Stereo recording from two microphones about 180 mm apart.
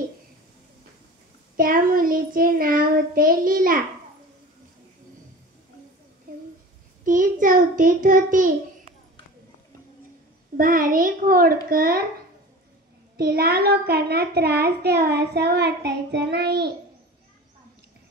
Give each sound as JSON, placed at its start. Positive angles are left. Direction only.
{"t": 1.6, "sound": "child singing", "side_deg": -50}
{"t": 7.1, "sound": "child singing", "side_deg": -50}
{"t": 10.6, "sound": "child singing", "side_deg": -50}
{"t": 11.7, "sound": "a child's voice", "side_deg": -55}
{"t": 13.2, "sound": "a child's voice", "side_deg": -60}